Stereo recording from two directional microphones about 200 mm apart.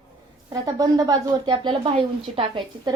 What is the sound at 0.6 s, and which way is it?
A woman's voice, 20° right (ahead or behind).